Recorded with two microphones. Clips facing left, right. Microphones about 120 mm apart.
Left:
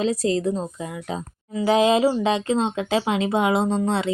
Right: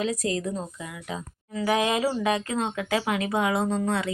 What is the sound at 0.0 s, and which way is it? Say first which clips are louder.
Speech: left 6 dB; 30° left (ahead or behind).